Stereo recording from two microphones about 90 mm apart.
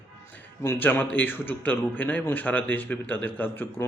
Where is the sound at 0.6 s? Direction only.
25° left (ahead or behind).